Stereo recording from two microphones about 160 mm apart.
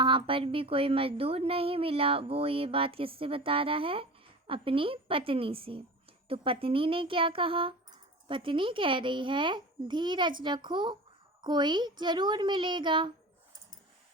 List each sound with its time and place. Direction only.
0.0 s a woman's voice: 30° right (ahead or behind)